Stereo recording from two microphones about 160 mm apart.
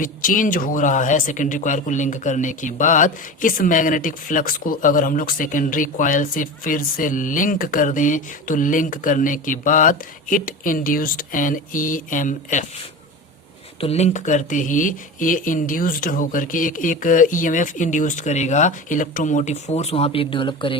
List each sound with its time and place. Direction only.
0.0 s speech: 60° left (ahead or behind)
13.8 s speech: 45° left (ahead or behind)